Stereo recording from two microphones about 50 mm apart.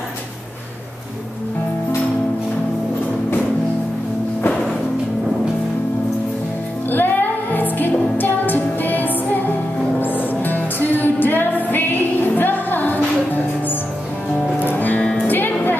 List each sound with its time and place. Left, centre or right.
6.9 s music: left